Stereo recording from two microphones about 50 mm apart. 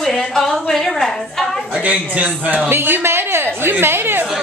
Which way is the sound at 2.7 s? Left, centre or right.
Right.